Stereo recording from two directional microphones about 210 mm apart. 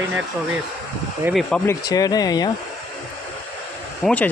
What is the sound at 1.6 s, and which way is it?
Speech, 15° left (ahead or behind).